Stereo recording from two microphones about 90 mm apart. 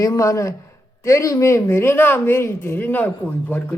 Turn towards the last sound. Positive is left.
turn(degrees=20)  # may be behind; listen again after turning